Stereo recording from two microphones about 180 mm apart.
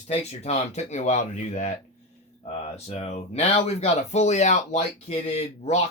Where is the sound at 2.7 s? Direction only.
35° left (ahead or behind).